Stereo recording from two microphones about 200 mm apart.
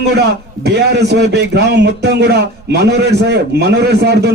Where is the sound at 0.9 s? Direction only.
55° right (ahead or behind).